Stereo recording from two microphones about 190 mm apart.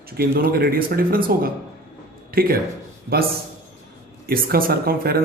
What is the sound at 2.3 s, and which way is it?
Speech, 50° right (ahead or behind).